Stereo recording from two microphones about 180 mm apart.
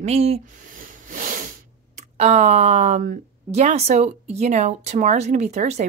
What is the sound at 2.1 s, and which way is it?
Speech, 40° right (ahead or behind).